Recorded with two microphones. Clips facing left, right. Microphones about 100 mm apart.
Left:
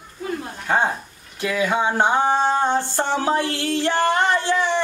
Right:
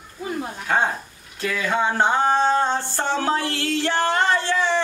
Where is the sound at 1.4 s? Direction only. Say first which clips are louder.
Left 2 dB; 10° left (ahead or behind).